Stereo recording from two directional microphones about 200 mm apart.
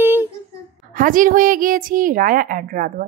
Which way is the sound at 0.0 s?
10° right (ahead or behind).